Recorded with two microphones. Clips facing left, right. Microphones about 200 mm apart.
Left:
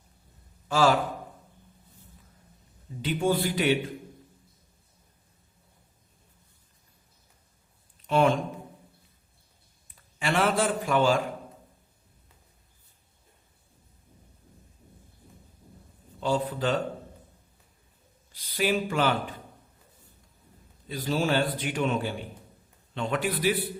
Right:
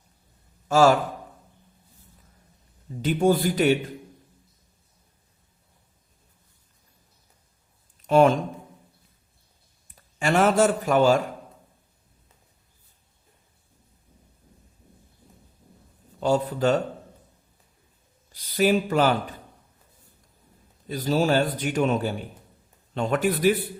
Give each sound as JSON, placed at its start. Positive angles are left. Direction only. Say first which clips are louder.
{"t": 0.7, "sound": "a man's voice", "louder": "right 5 dB", "side_deg": -45}
{"t": 3.0, "sound": "a man's voice", "louder": "right 5 dB", "side_deg": -45}
{"t": 8.0, "sound": "speech", "louder": "right 5 dB", "side_deg": -45}
{"t": 10.2, "sound": "a man's voice", "louder": "right 6 dB", "side_deg": -45}
{"t": 16.2, "sound": "a man's voice", "louder": "right 5 dB", "side_deg": -45}
{"t": 18.3, "sound": "speech", "louder": "right 6 dB", "side_deg": -45}
{"t": 20.8, "sound": "a man's voice", "louder": "right 5 dB", "side_deg": -45}